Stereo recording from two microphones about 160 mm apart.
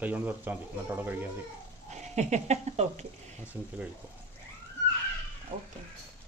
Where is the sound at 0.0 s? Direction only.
10° right (ahead or behind).